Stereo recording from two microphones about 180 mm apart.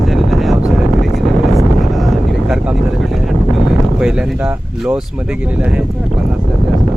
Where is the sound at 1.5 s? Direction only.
Centre (ahead or behind).